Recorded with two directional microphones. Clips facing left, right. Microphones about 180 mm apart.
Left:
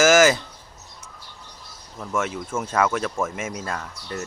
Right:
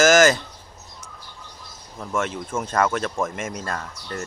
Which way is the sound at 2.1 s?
5° left (ahead or behind).